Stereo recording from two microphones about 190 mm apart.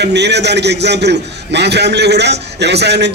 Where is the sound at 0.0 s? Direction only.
60° right (ahead or behind).